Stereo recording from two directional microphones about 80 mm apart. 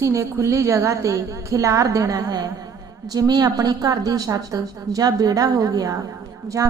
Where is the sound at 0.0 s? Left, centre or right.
Right.